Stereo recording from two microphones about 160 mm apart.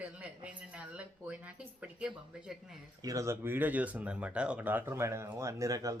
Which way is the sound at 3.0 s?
20° right (ahead or behind).